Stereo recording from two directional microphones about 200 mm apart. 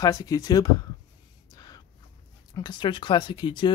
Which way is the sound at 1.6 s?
20° left (ahead or behind).